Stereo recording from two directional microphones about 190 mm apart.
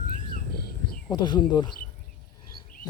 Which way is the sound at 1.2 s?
25° left (ahead or behind).